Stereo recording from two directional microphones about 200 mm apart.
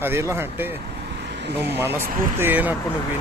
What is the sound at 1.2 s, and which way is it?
Vehicle, 60° right (ahead or behind).